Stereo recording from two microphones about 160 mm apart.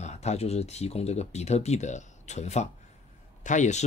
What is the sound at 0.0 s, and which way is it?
Speech, 45° left (ahead or behind).